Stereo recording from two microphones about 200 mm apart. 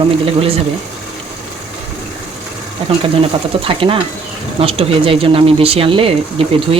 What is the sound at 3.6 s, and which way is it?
Speech, 25° right (ahead or behind).